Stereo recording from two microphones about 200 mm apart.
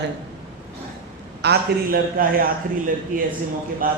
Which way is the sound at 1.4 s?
50° right (ahead or behind).